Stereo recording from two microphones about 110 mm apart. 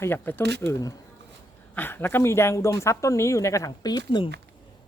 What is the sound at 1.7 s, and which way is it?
Speech, 20° left (ahead or behind).